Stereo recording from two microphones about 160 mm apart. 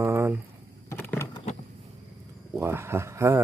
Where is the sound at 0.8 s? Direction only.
15° left (ahead or behind).